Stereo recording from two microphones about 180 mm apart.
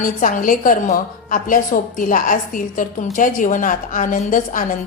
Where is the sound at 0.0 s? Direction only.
50° left (ahead or behind).